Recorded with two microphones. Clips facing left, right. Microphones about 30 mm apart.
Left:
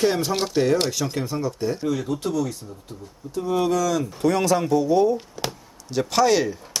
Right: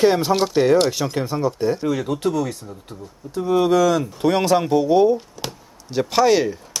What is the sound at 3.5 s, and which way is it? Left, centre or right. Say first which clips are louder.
Speech: right 5 dB; centre.